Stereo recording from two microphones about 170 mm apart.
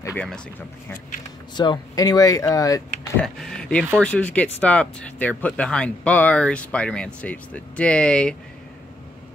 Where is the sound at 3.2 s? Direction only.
Centre (ahead or behind).